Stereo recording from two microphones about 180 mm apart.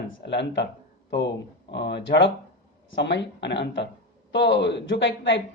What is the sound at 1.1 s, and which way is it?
Speech, 75° left (ahead or behind).